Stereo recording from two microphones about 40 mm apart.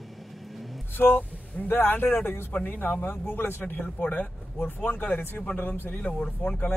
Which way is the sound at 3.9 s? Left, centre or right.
Left.